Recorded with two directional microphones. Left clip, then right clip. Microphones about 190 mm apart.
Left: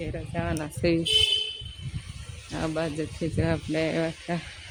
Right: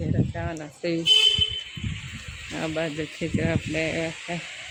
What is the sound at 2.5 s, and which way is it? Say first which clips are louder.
Speech: right 1 dB; centre (ahead or behind).